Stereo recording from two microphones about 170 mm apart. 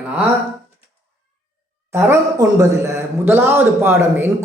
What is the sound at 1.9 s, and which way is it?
A man's voice, 15° right (ahead or behind).